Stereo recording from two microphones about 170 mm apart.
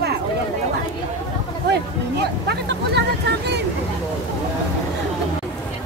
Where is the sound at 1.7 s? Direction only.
75° right (ahead or behind).